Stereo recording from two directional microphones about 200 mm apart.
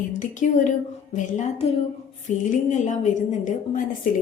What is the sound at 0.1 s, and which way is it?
A woman's voice, 40° left (ahead or behind).